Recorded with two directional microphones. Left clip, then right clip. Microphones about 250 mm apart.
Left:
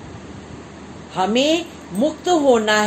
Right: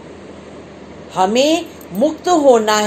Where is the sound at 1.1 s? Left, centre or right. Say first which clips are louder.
Right 4 dB; centre.